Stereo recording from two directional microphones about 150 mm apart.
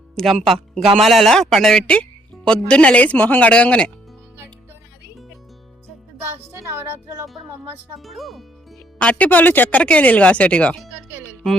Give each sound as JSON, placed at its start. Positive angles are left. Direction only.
{"t": 0.4, "sound": "speech", "side_deg": 0}
{"t": 6.7, "sound": "speech", "side_deg": -15}
{"t": 7.9, "sound": "speech", "side_deg": 0}